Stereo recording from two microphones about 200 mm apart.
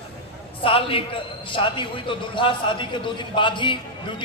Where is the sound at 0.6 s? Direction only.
25° left (ahead or behind).